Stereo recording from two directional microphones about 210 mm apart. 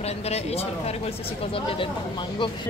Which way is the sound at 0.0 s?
30° left (ahead or behind).